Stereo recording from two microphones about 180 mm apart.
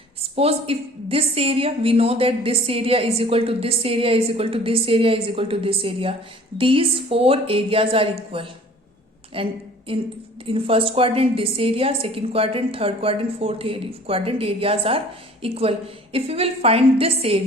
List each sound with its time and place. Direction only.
0.2 s a woman's voice: 35° right (ahead or behind)